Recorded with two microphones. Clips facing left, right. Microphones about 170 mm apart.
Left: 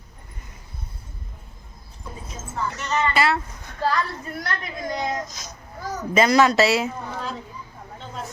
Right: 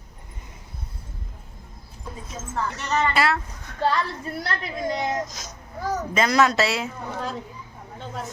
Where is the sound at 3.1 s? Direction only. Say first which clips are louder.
Left 1 dB; centre (ahead or behind).